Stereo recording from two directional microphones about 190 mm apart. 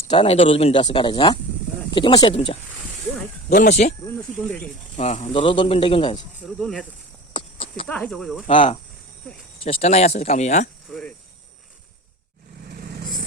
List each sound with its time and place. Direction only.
0.1 s speech: 30° left (ahead or behind)
3.5 s speech: 40° left (ahead or behind)
4.9 s speech: 35° left (ahead or behind)
6.4 s speech: 5° left (ahead or behind)
7.3 s clip-clop: 30° left (ahead or behind)
7.9 s speech: 5° left (ahead or behind)
9.6 s speech: 30° left (ahead or behind)
10.8 s speech: centre (ahead or behind)
12.7 s vehicle: 50° right (ahead or behind)